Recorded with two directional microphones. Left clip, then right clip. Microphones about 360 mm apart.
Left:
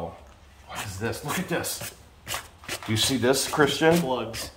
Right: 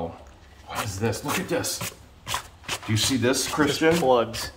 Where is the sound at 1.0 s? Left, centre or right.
Centre.